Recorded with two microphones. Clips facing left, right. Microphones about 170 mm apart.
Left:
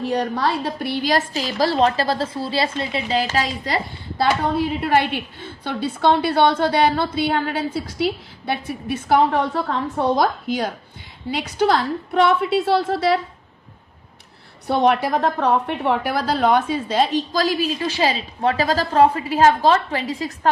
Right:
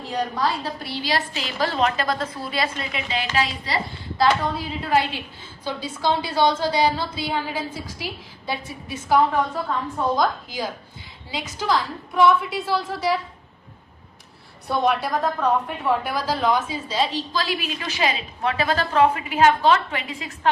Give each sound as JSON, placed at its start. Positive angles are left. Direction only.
{"t": 0.0, "sound": "a woman's voice", "side_deg": 65}
{"t": 4.2, "sound": "a woman's voice", "side_deg": 60}
{"t": 14.7, "sound": "a woman's voice", "side_deg": 65}